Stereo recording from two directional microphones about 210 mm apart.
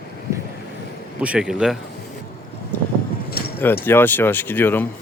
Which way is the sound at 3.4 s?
45° left (ahead or behind).